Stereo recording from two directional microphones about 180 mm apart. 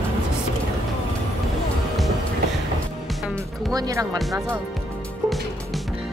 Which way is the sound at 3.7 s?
20° right (ahead or behind).